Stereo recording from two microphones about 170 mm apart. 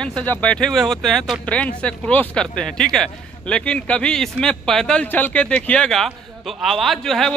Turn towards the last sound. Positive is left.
turn(degrees=0)  # may be behind; listen again after turning